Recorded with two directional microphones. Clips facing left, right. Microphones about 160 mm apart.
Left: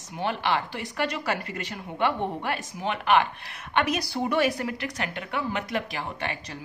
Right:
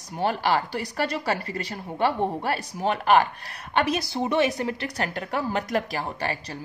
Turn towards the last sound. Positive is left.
turn(degrees=-35)  # may be behind; listen again after turning